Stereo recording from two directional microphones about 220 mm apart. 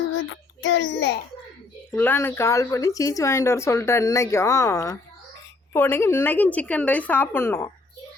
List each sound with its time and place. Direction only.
0.1 s a child's voice: 55° left (ahead or behind)
2.0 s speech: 10° left (ahead or behind)